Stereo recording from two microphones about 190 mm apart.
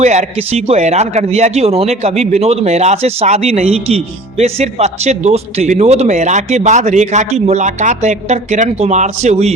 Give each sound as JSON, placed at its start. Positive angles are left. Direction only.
{"t": 0.0, "sound": "speech", "side_deg": -35}